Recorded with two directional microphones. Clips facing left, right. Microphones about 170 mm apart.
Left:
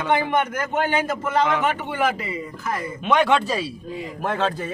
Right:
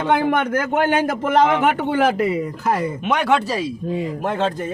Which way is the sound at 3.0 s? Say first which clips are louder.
Left 5 dB; 10° right (ahead or behind).